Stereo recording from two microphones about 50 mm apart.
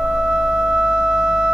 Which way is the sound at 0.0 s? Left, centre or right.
Centre.